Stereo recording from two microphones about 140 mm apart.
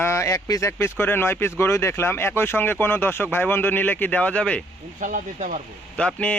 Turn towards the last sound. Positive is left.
turn(degrees=10)  # may be behind; listen again after turning